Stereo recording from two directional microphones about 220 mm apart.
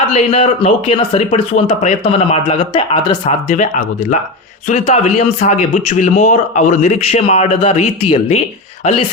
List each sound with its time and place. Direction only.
0.2 s speech: 30° left (ahead or behind)
3.2 s speech: 35° left (ahead or behind)